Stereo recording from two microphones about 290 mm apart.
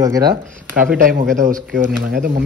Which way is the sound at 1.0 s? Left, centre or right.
Right.